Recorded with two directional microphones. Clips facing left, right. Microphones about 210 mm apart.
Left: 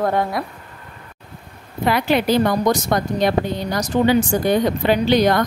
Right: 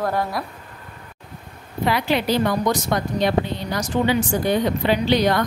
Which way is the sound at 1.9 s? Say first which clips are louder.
Left 3 dB; 50° left (ahead or behind).